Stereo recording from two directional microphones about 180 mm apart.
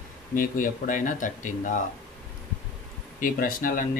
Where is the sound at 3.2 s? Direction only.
50° left (ahead or behind).